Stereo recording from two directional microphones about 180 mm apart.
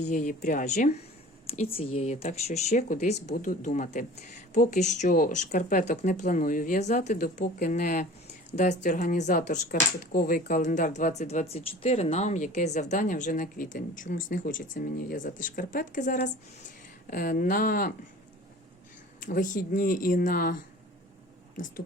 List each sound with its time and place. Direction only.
0.0 s speech: 45° left (ahead or behind)
1.5 s speech: 30° left (ahead or behind)
10.1 s speech: 55° left (ahead or behind)
19.2 s speech: 50° left (ahead or behind)